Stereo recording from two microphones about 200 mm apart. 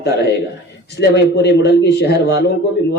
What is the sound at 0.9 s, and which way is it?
A man's voice, 55° left (ahead or behind).